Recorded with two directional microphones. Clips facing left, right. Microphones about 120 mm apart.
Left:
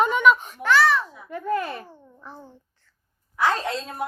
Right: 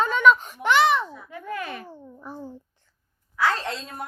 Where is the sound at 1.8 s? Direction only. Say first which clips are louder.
Right 4 dB; 15° right (ahead or behind).